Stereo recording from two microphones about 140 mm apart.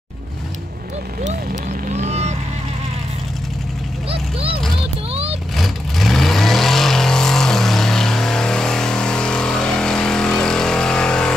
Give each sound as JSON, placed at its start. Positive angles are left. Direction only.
{"t": 1.2, "sound": "vehicle", "side_deg": -60}
{"t": 4.1, "sound": "vehicle", "side_deg": -45}
{"t": 5.6, "sound": "vehicle", "side_deg": 0}